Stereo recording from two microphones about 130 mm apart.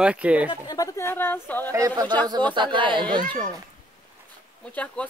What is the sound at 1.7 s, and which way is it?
Speech, 30° right (ahead or behind).